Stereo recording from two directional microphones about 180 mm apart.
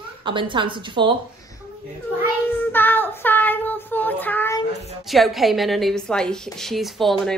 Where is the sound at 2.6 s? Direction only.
10° left (ahead or behind).